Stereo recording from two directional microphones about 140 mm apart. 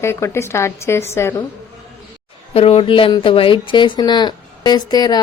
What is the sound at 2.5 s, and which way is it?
Speech, 45° left (ahead or behind).